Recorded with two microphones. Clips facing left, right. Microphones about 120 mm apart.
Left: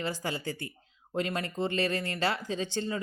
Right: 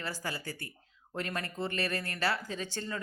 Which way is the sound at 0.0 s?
20° left (ahead or behind).